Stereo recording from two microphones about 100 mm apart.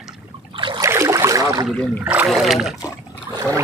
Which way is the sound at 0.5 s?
55° right (ahead or behind).